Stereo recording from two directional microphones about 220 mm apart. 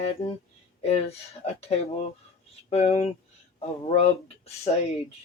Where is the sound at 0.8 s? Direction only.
25° left (ahead or behind).